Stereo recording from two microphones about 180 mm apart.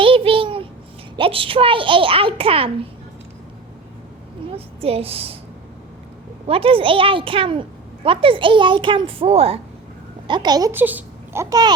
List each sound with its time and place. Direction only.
0.0 s a sound: 30° right (ahead or behind)
1.1 s a child's voice: 30° right (ahead or behind)
4.5 s a woman's voice: 30° right (ahead or behind)
6.5 s a child's voice: 30° right (ahead or behind)